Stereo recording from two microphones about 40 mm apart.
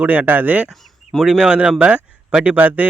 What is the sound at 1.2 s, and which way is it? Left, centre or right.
Speech, centre.